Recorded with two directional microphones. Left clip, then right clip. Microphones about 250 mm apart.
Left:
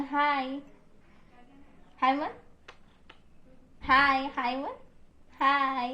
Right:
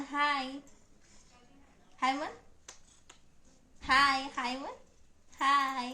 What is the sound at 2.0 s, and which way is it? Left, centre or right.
Speech, centre.